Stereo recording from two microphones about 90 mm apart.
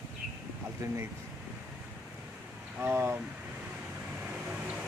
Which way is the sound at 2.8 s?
25° right (ahead or behind).